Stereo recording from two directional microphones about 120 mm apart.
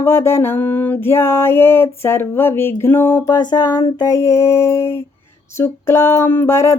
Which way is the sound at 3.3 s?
35° left (ahead or behind).